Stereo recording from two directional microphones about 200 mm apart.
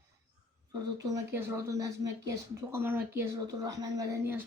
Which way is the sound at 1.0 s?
15° right (ahead or behind).